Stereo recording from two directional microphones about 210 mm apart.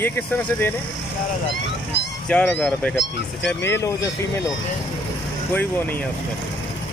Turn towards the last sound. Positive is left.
turn(degrees=10)  # may be behind; listen again after turning